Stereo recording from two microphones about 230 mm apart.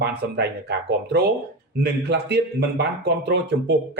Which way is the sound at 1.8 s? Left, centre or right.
Right.